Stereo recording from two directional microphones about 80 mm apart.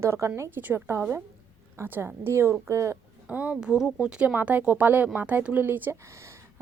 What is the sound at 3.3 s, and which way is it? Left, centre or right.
Speech, centre.